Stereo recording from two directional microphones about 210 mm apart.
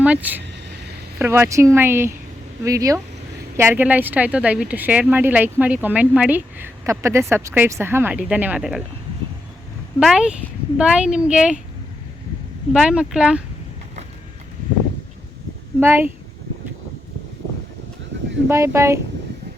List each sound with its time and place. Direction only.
0.0 s speech: 5° right (ahead or behind)
10.0 s a woman's voice: centre (ahead or behind)
12.7 s a woman's voice: 5° right (ahead or behind)
15.8 s speech: 10° right (ahead or behind)
18.4 s speech: 15° right (ahead or behind)